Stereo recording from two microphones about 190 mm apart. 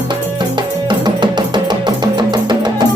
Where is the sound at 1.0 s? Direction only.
25° right (ahead or behind).